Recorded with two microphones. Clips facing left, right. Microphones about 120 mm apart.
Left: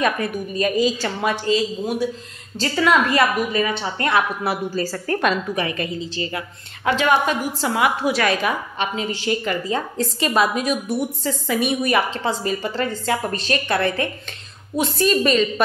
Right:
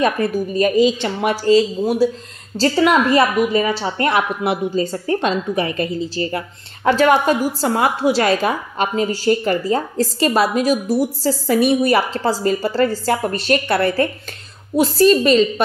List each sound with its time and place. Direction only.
0.0 s a woman's voice: 35° right (ahead or behind)